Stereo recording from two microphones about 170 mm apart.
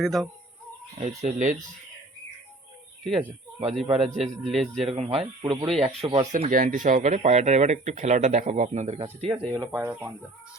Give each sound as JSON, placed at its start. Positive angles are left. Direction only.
{"t": 0.0, "sound": "a man's voice", "side_deg": 0}
{"t": 0.9, "sound": "speech", "side_deg": -40}
{"t": 3.8, "sound": "speech", "side_deg": -35}
{"t": 4.2, "sound": "a man's voice", "side_deg": 0}
{"t": 4.8, "sound": "speech", "side_deg": -35}
{"t": 6.3, "sound": "speech", "side_deg": -50}
{"t": 9.3, "sound": "speech", "side_deg": -25}
{"t": 9.7, "sound": "speech", "side_deg": -10}